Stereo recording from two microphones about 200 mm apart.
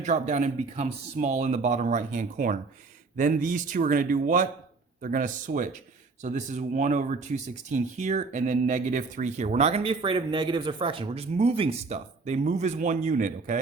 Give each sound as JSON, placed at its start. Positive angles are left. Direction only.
{"t": 0.0, "sound": "speech", "side_deg": -35}